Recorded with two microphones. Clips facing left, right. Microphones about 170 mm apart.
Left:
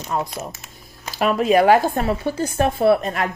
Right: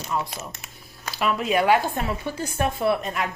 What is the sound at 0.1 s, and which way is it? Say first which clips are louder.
Speech: left 4 dB; 45° left (ahead or behind).